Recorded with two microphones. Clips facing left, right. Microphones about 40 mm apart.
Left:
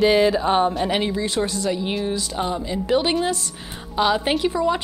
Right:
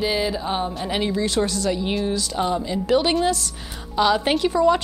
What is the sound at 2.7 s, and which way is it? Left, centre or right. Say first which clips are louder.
A woman's voice: even; left.